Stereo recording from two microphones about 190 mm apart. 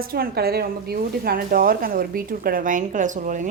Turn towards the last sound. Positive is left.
turn(degrees=-40)  # may be behind; listen again after turning